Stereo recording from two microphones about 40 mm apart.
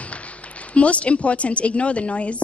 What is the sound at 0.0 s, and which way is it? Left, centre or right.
A woman's voice, left.